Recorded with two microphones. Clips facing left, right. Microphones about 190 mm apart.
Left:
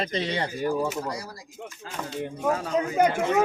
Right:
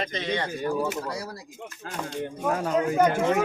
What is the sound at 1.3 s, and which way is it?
Speech, 60° right (ahead or behind).